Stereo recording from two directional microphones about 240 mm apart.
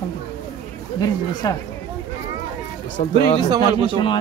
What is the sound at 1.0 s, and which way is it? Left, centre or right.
Speech, centre.